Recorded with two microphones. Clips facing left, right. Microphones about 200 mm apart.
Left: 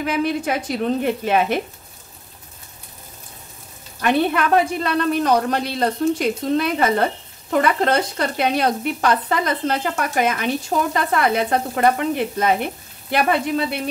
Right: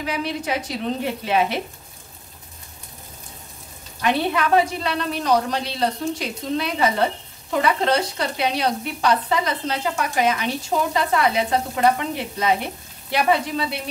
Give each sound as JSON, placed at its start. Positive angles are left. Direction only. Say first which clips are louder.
{"t": 0.0, "sound": "sizzle", "louder": "left 5 dB", "side_deg": 50}
{"t": 4.0, "sound": "sizzle", "louder": "left 3 dB", "side_deg": 50}